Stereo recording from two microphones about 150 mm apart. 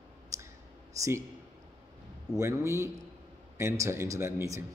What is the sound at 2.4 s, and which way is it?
A man's voice, 20° right (ahead or behind).